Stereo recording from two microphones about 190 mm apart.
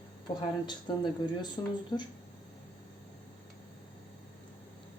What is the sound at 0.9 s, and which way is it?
Speech, 25° left (ahead or behind).